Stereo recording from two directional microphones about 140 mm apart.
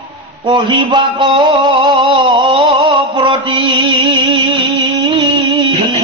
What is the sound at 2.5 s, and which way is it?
Music, 40° right (ahead or behind).